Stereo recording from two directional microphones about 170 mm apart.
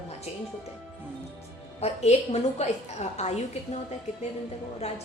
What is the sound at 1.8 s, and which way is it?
A woman's voice, 40° left (ahead or behind).